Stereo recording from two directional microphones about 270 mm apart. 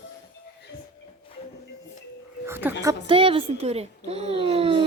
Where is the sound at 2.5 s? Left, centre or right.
Centre.